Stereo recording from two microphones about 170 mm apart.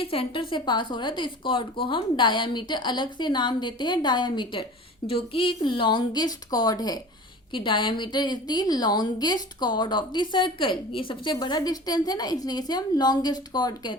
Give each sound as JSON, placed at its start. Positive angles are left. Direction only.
{"t": 0.0, "sound": "a woman's voice", "side_deg": 35}